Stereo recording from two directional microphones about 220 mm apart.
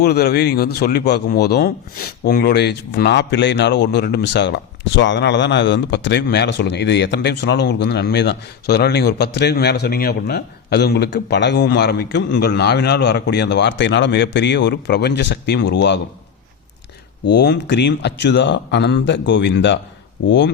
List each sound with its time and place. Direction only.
0.0 s speech: 45° left (ahead or behind)
17.2 s speech: 50° left (ahead or behind)